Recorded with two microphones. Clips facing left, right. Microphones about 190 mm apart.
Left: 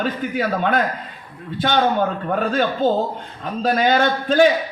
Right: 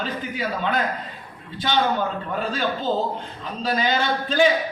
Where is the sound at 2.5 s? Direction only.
50° left (ahead or behind).